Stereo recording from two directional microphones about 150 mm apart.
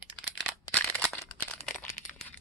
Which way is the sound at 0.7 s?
5° left (ahead or behind).